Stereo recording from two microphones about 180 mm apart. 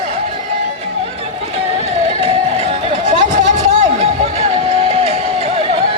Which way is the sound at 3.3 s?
40° right (ahead or behind).